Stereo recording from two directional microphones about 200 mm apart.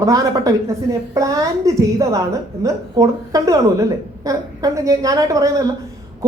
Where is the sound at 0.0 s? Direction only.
15° right (ahead or behind).